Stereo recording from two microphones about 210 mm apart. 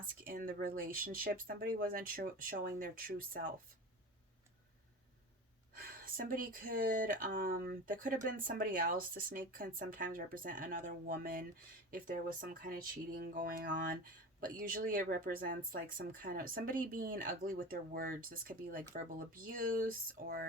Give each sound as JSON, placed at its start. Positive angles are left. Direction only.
{"t": 0.3, "sound": "speech", "side_deg": -40}
{"t": 5.7, "sound": "speech", "side_deg": -45}